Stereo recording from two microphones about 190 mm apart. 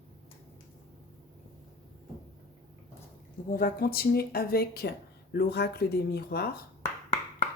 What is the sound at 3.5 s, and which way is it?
Speech, 50° left (ahead or behind).